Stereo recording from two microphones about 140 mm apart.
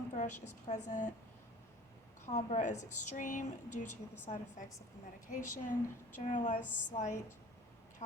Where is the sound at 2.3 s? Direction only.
55° left (ahead or behind).